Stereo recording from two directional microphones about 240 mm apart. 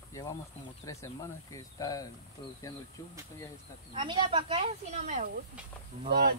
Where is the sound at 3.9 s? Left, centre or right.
Right.